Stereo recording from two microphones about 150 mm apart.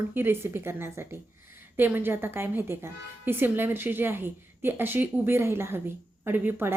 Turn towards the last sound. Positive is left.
turn(degrees=-15)  # may be behind; listen again after turning